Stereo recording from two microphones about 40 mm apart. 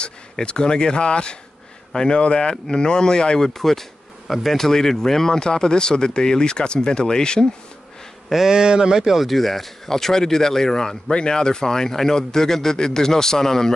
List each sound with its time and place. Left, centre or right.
0.0 s speech: left
8.5 s a man's voice: centre
9.2 s a man's voice: centre